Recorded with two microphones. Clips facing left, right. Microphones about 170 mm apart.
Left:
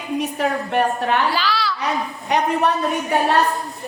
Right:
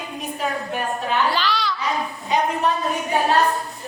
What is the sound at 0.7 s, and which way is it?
Speech, 65° left (ahead or behind).